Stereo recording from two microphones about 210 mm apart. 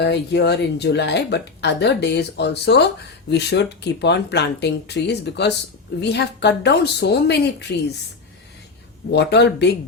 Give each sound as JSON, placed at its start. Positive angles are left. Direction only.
{"t": 0.0, "sound": "speech", "side_deg": 55}
{"t": 9.1, "sound": "speech", "side_deg": 55}